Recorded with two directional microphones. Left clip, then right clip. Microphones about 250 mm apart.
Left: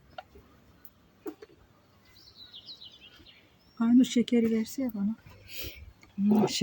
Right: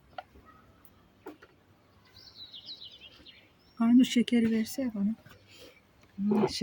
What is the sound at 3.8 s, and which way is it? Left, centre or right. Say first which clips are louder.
Speech: even; centre.